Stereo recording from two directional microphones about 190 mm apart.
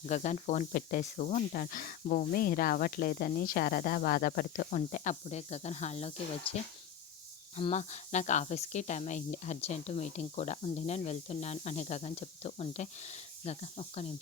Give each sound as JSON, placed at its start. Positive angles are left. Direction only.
{"t": 0.0, "sound": "speech", "side_deg": 40}